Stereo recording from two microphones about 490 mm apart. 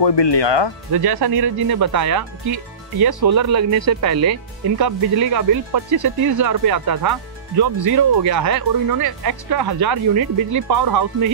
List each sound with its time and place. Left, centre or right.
0.0 s speech: left
0.9 s speech: right
9.6 s speech: right